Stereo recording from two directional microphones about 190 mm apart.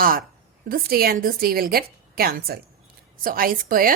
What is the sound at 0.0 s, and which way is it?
Speech, 50° right (ahead or behind).